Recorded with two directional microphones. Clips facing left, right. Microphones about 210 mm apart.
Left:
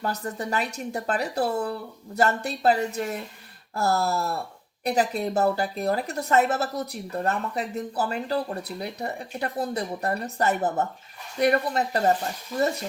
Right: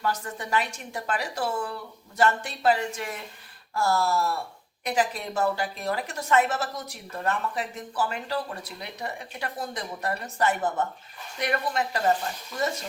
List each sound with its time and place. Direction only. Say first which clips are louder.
0.0 s a woman's voice: left 1 dB; 35° left (ahead or behind)